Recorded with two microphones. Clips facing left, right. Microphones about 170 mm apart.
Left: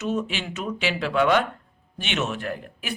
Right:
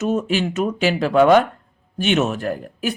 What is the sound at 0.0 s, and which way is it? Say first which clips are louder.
Speech: right 7 dB; 45° right (ahead or behind).